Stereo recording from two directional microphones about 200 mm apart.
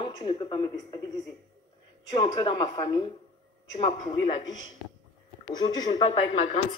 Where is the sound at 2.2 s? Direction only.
20° left (ahead or behind).